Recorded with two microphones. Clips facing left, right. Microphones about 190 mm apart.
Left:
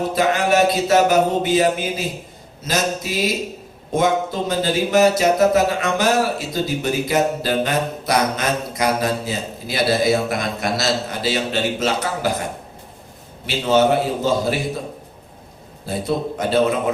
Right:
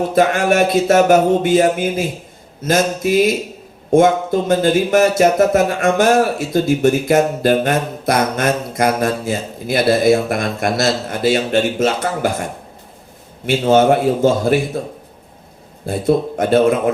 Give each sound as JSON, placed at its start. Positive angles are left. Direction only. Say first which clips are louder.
{"t": 0.1, "sound": "speech", "louder": "right 3 dB", "side_deg": -50}
{"t": 13.5, "sound": "speech", "louder": "right 4 dB", "side_deg": -50}
{"t": 15.9, "sound": "speech", "louder": "right 6 dB", "side_deg": -50}